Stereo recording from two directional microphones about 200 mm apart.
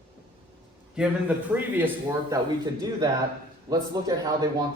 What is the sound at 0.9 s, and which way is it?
A man's voice, 5° right (ahead or behind).